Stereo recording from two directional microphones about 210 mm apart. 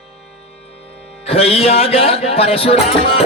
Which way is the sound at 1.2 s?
30° left (ahead or behind).